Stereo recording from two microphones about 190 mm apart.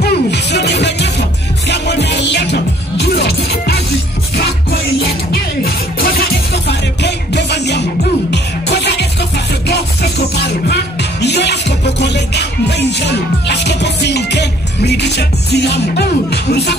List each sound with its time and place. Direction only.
0.0 s music: 60° left (ahead or behind)
5.0 s music: 55° left (ahead or behind)